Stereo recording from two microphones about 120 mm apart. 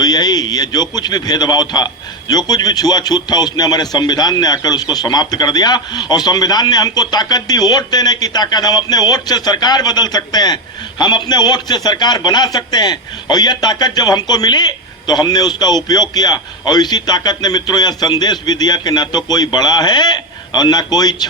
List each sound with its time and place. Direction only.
0.0 s a man's voice: 35° left (ahead or behind)